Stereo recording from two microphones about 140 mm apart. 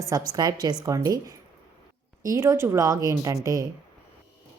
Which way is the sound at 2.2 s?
20° right (ahead or behind).